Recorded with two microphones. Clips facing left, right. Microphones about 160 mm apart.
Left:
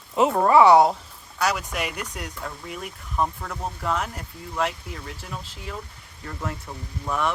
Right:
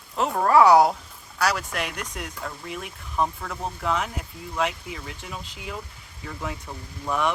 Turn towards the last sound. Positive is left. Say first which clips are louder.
# right 1 dB
turn(degrees=0)  # may be behind; listen again after turning